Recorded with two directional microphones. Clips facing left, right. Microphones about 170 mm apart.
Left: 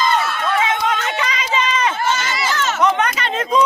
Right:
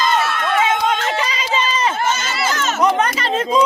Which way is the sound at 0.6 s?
30° right (ahead or behind).